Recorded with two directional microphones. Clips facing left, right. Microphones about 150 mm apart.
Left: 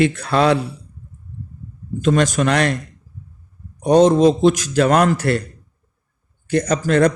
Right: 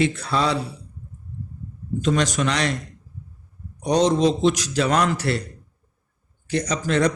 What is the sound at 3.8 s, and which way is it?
A man's voice, 50° left (ahead or behind).